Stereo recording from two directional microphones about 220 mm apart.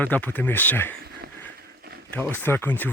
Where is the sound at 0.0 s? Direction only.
5° left (ahead or behind).